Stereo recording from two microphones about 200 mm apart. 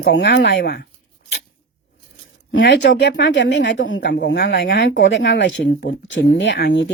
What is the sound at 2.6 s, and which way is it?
Speech, 60° left (ahead or behind).